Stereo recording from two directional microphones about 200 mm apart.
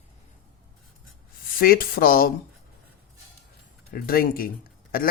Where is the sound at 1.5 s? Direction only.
45° left (ahead or behind).